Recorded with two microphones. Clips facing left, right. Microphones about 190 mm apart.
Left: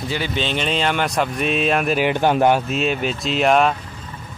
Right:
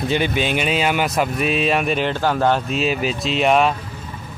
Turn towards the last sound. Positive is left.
turn(degrees=0)  # may be behind; listen again after turning